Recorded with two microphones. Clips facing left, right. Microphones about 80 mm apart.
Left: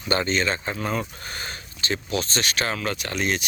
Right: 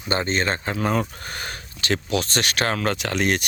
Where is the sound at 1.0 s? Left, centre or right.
Right.